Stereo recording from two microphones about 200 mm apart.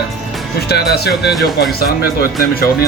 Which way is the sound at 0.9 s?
55° left (ahead or behind).